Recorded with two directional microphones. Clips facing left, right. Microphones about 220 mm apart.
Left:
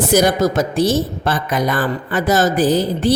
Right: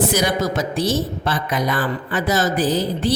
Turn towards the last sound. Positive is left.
turn(degrees=50)  # may be behind; listen again after turning